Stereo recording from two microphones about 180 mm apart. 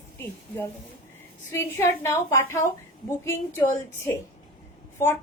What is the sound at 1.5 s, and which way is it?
A woman's voice, 15° left (ahead or behind).